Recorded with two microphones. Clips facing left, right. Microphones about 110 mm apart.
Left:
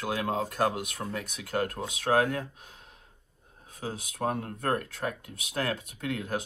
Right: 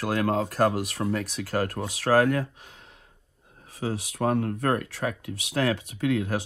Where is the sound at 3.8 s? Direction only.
65° right (ahead or behind).